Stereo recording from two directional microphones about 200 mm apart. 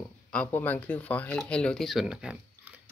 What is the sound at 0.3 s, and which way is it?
Speech, 5° left (ahead or behind).